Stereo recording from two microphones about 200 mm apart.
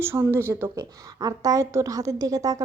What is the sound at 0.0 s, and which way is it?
A woman's voice, 10° right (ahead or behind).